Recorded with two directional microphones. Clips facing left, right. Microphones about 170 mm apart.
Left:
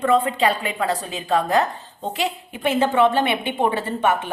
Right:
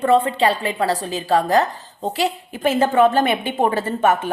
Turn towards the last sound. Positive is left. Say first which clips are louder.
# right 3 dB
turn(degrees=-40)  # may be behind; listen again after turning